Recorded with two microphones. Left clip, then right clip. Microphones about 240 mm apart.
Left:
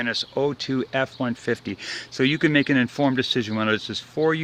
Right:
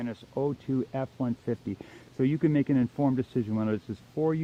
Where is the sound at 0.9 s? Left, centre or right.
Centre.